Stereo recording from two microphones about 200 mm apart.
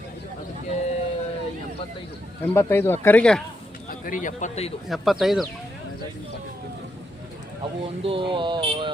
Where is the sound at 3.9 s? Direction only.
40° left (ahead or behind).